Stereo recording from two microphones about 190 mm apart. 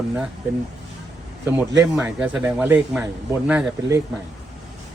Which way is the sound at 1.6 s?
5° right (ahead or behind).